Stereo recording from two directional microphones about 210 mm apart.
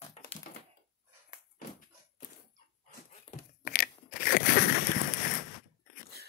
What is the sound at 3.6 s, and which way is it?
Crushing, 45° left (ahead or behind).